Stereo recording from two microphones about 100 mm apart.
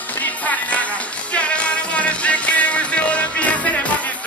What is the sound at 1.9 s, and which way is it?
Music, 15° left (ahead or behind).